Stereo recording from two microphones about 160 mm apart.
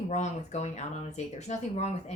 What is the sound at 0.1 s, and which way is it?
Speech, 45° left (ahead or behind).